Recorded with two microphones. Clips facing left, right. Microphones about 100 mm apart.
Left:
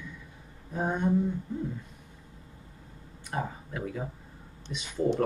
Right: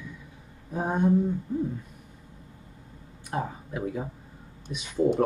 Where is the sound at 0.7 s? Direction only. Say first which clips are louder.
Right 4 dB; 10° right (ahead or behind).